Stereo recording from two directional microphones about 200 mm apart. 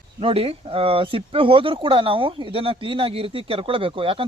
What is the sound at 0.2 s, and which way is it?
Speech, 30° right (ahead or behind).